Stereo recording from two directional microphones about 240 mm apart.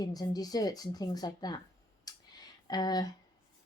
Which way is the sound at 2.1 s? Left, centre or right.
Centre.